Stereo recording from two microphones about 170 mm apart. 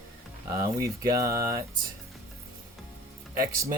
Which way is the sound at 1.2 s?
60° right (ahead or behind).